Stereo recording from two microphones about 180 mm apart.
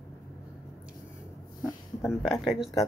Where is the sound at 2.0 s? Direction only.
Centre (ahead or behind).